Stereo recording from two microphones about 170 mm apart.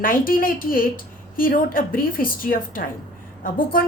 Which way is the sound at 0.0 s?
55° left (ahead or behind).